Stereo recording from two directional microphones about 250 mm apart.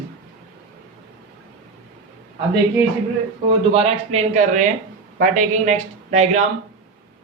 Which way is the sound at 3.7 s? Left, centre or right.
Right.